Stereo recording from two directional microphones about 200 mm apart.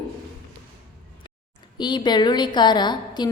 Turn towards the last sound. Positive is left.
turn(degrees=20)  # may be behind; listen again after turning